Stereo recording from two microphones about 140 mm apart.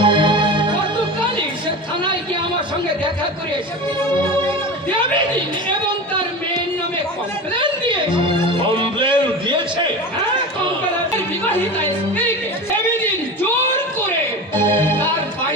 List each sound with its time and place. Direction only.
0.0 s music: 35° right (ahead or behind)
7.6 s music: 35° right (ahead or behind)
8.8 s a sound: 35° right (ahead or behind)
11.4 s music: 15° left (ahead or behind)
14.5 s music: 15° left (ahead or behind)